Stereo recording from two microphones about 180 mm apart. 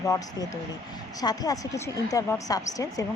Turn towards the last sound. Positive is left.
turn(degrees=20)  # may be behind; listen again after turning